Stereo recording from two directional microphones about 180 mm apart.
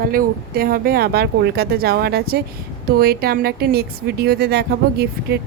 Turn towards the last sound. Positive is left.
turn(degrees=-65)  # may be behind; listen again after turning